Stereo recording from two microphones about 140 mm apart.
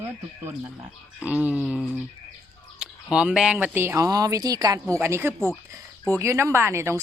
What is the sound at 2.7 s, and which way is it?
Speech, 5° right (ahead or behind).